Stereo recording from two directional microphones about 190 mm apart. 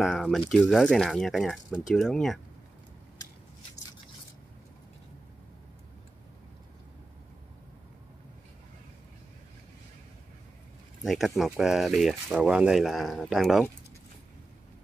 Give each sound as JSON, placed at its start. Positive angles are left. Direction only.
{"t": 0.0, "sound": "speech", "side_deg": 0}
{"t": 11.1, "sound": "speech", "side_deg": 0}